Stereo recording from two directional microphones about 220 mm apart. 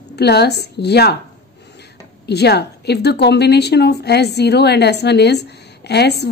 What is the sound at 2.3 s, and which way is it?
A woman's voice, 50° left (ahead or behind).